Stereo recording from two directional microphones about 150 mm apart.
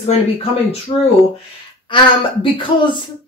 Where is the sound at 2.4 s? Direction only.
35° left (ahead or behind).